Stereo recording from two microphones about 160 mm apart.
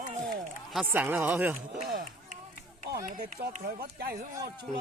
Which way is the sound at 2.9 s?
65° right (ahead or behind).